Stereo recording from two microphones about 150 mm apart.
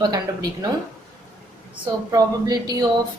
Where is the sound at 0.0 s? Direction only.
25° right (ahead or behind).